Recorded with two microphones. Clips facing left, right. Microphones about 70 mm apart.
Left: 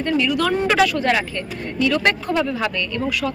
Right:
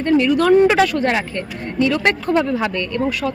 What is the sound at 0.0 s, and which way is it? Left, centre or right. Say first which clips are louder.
Speech: right 5 dB; right.